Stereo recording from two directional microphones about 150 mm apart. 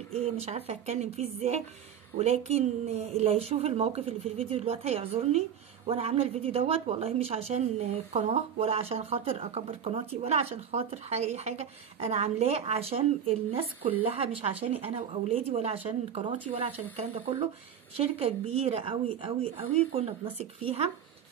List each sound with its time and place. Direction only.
0.1 s a woman's voice: 45° right (ahead or behind)